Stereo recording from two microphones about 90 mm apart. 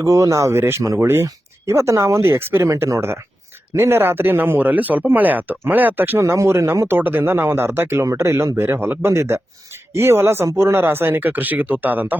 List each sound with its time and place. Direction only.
0.0 s speech: 35° right (ahead or behind)
6.2 s speech: 35° right (ahead or behind)